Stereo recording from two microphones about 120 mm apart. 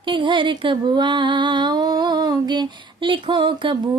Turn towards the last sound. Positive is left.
turn(degrees=-45)  # may be behind; listen again after turning